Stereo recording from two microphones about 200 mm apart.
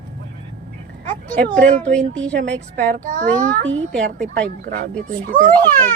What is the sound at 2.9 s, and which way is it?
Speech, 40° right (ahead or behind).